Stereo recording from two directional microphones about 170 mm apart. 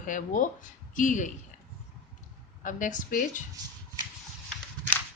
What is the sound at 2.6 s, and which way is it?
Speech, 50° left (ahead or behind).